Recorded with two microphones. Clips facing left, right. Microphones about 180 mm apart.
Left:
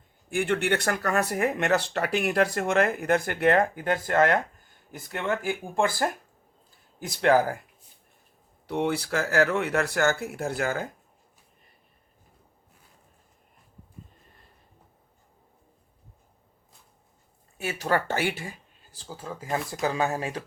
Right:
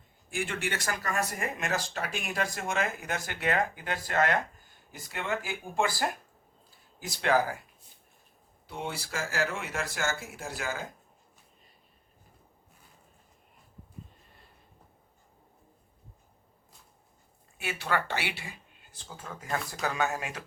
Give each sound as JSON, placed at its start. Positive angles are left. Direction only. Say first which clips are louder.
{"t": 0.3, "sound": "speech", "louder": "left 8 dB", "side_deg": 60}
{"t": 7.1, "sound": "speech", "louder": "left 5 dB", "side_deg": 50}
{"t": 8.6, "sound": "speech", "louder": "left 10 dB", "side_deg": 70}
{"t": 17.6, "sound": "speech", "louder": "left 5 dB", "side_deg": 40}